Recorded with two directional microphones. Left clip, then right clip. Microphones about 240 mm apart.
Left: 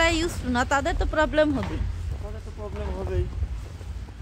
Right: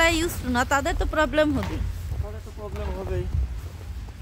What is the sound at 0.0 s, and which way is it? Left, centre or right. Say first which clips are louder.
Speech: right 1 dB; centre.